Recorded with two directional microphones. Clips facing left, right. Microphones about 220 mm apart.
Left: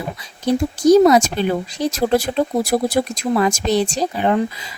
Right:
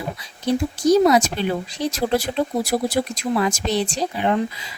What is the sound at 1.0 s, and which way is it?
Speech, 45° left (ahead or behind).